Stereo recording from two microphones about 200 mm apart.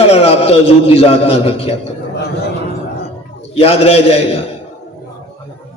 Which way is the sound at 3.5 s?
30° left (ahead or behind).